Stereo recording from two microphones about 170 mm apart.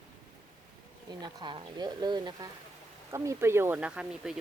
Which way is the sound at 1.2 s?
25° right (ahead or behind).